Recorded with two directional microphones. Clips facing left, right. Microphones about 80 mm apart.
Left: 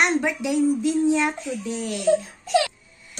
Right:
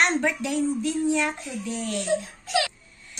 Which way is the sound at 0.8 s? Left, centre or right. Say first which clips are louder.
Left 4 dB; left.